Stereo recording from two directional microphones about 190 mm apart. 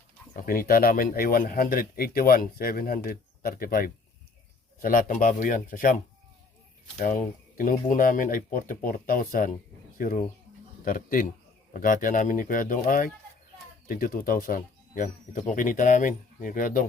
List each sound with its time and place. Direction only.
0.3 s speech: 50° left (ahead or behind)